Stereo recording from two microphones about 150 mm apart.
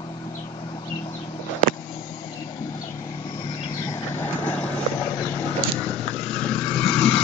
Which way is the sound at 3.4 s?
35° left (ahead or behind).